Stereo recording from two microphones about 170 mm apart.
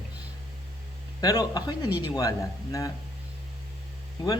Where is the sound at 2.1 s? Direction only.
20° left (ahead or behind).